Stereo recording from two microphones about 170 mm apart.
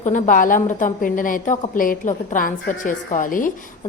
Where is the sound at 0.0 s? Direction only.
50° left (ahead or behind).